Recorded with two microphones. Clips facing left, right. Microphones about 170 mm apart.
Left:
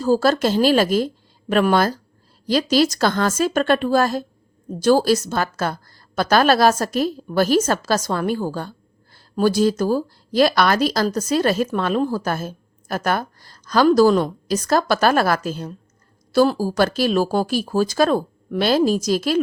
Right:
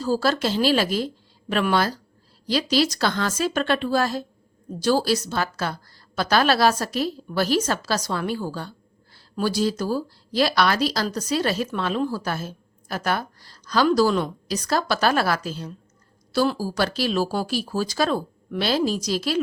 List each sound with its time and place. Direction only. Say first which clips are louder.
0.0 s speech: left 5 dB; 50° left (ahead or behind)